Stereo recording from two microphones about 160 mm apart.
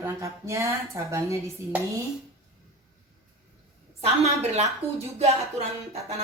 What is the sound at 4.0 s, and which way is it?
A woman's voice, 40° right (ahead or behind).